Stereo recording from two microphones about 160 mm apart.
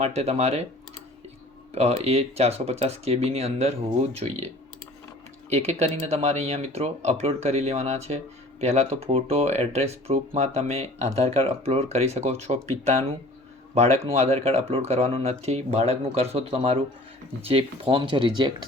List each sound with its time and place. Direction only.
0.0 s speech: 40° right (ahead or behind)
1.7 s speech: 40° right (ahead or behind)